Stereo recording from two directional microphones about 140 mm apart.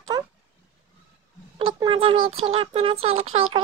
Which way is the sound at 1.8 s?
40° right (ahead or behind).